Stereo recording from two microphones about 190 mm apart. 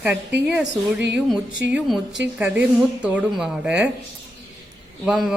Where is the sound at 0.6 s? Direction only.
65° right (ahead or behind).